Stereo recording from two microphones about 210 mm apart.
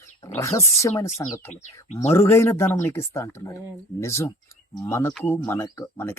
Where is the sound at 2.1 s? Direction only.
10° left (ahead or behind).